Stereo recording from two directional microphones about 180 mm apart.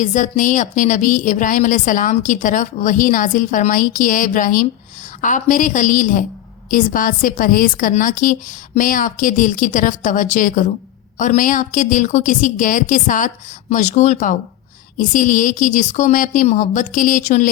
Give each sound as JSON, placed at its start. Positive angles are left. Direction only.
{"t": 0.0, "sound": "speech", "side_deg": 45}